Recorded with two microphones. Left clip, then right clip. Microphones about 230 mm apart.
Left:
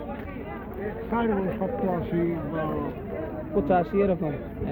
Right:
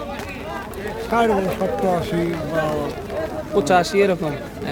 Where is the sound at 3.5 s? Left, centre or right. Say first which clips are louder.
Right 7 dB; centre.